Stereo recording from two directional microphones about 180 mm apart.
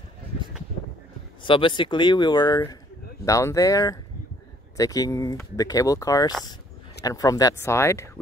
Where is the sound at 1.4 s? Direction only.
25° left (ahead or behind).